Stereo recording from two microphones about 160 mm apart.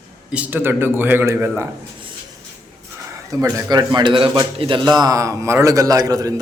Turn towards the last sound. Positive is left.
turn(degrees=-20)  # may be behind; listen again after turning